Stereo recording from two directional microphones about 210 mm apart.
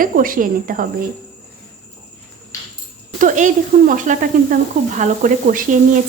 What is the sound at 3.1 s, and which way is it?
Speech, 35° right (ahead or behind).